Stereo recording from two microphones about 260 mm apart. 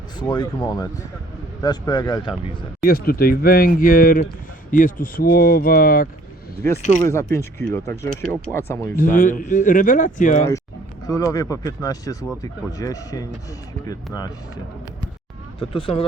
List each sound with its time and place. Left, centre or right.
0.2 s speech: centre
2.8 s speech: left
7.0 s speech: centre
9.0 s a man's voice: left
11.0 s speech: centre
15.5 s a man's voice: left